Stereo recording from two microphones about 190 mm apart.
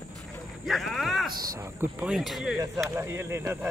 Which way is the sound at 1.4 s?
15° right (ahead or behind).